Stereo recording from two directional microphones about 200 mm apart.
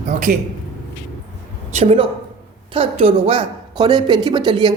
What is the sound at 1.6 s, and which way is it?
A woman's voice, 35° right (ahead or behind).